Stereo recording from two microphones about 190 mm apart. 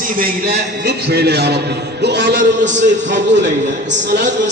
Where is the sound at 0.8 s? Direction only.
60° right (ahead or behind).